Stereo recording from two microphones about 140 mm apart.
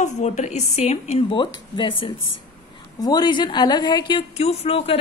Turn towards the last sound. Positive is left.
turn(degrees=45)  # may be behind; listen again after turning